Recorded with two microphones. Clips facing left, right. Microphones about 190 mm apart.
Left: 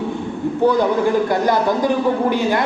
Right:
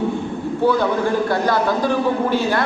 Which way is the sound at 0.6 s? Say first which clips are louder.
Left 2 dB; 15° left (ahead or behind).